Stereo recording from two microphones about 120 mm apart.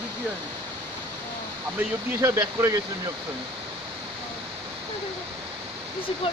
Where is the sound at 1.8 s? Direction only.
25° right (ahead or behind).